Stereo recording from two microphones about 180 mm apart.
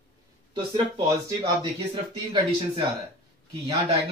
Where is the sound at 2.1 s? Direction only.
25° right (ahead or behind).